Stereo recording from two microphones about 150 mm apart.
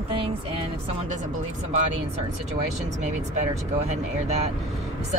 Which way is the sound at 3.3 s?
50° right (ahead or behind).